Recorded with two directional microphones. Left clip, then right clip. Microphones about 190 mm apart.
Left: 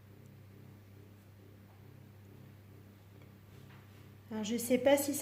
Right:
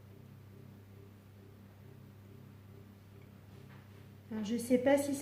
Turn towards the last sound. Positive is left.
turn(degrees=45)  # may be behind; listen again after turning